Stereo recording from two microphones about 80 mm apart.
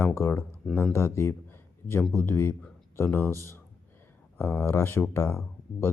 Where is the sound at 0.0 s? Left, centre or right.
Left.